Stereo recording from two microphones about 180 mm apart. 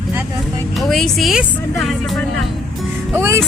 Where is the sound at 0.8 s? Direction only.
Centre (ahead or behind).